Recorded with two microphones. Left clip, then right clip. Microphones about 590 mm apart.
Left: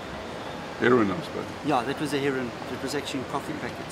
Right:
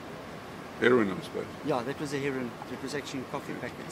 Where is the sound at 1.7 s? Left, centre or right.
Right.